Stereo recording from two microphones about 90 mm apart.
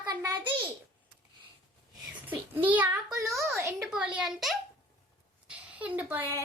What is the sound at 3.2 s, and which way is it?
Speech, 35° right (ahead or behind).